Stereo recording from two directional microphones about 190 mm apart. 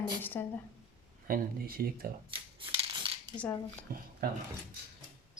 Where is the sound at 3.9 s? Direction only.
50° right (ahead or behind).